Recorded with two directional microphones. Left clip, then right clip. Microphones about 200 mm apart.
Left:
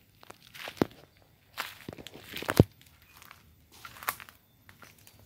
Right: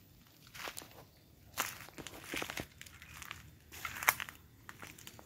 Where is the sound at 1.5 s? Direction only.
Centre (ahead or behind).